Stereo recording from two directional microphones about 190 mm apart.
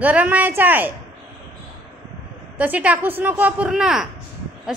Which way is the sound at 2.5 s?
10° right (ahead or behind).